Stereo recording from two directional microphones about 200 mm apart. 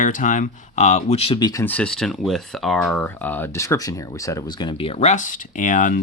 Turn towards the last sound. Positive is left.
turn(degrees=40)  # may be behind; listen again after turning